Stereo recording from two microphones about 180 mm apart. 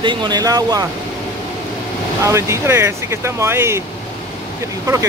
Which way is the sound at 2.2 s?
15° right (ahead or behind).